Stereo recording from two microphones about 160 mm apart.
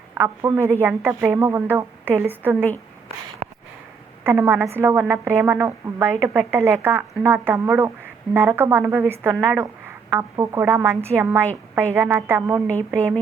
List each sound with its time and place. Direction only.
0.1 s a woman's voice: 15° right (ahead or behind)
4.2 s a woman's voice: 15° right (ahead or behind)